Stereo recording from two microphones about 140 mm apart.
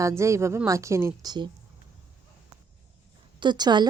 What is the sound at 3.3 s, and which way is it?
Speech, 30° right (ahead or behind).